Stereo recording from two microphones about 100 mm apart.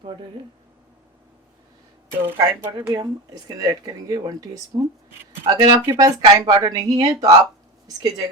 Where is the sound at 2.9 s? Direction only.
40° right (ahead or behind).